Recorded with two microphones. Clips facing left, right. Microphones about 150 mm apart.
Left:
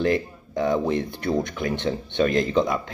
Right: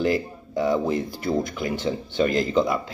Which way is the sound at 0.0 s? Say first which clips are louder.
Left 1 dB; 5° right (ahead or behind).